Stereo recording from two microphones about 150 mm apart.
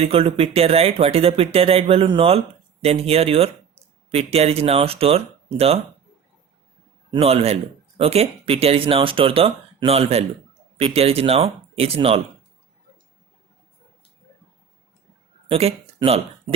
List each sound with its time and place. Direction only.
0.0 s a man's voice: 40° right (ahead or behind)
7.2 s a man's voice: 40° right (ahead or behind)
15.4 s speech: 40° right (ahead or behind)